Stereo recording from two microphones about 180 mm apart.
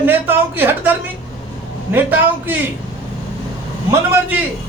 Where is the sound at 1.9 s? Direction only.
10° right (ahead or behind).